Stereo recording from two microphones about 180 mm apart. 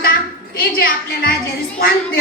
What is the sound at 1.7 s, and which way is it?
Speech, 60° left (ahead or behind).